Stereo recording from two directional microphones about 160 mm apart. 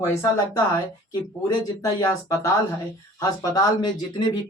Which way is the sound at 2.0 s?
20° left (ahead or behind).